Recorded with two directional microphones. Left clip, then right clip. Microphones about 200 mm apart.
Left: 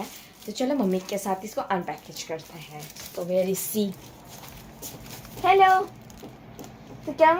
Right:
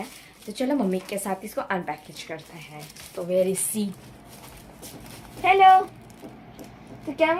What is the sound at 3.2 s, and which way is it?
Speech, 20° right (ahead or behind).